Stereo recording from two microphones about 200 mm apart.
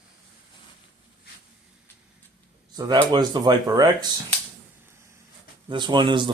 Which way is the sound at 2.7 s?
20° right (ahead or behind).